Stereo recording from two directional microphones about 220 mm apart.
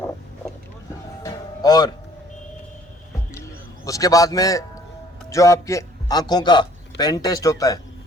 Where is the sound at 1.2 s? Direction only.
15° left (ahead or behind).